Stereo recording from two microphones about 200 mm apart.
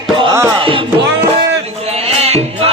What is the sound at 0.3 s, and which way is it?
Music, 15° right (ahead or behind).